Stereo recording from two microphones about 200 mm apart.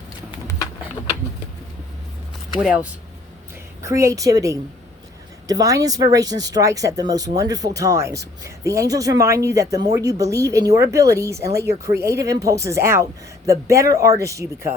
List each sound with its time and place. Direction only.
2.6 s speech: 5° right (ahead or behind)
3.8 s speech: 15° right (ahead or behind)